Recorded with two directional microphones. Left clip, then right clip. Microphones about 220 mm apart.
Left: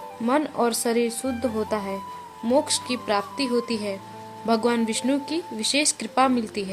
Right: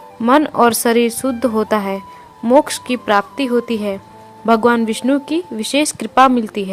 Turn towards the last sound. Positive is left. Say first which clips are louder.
# right 10 dB
turn(degrees=-25)  # may be behind; listen again after turning